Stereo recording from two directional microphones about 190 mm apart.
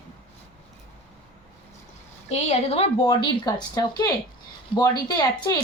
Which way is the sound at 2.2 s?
35° left (ahead or behind).